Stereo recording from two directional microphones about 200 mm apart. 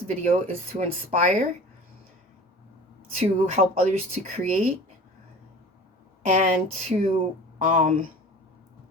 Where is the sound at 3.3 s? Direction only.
35° right (ahead or behind).